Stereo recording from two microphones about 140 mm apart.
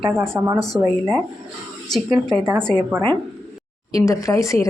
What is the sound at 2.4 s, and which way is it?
Speech, 20° right (ahead or behind).